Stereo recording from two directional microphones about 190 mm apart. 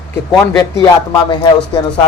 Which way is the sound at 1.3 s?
25° left (ahead or behind).